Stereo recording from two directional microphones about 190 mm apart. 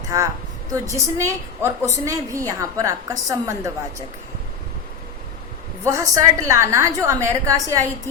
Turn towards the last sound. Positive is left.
turn(degrees=-15)  # may be behind; listen again after turning